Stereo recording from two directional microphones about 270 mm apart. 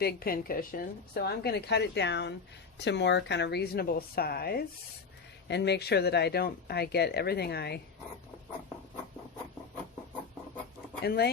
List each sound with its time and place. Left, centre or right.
0.0 s speech: left
11.0 s speech: left